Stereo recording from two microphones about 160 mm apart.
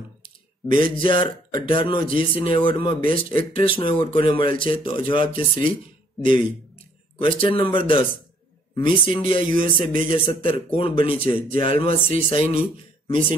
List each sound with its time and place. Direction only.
0.7 s a man's voice: 30° left (ahead or behind)
7.2 s a man's voice: 35° left (ahead or behind)